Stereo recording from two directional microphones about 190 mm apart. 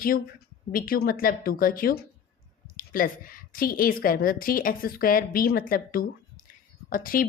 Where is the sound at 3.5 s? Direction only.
50° left (ahead or behind).